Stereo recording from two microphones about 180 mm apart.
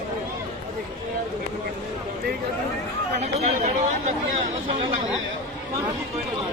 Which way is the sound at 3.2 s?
40° right (ahead or behind).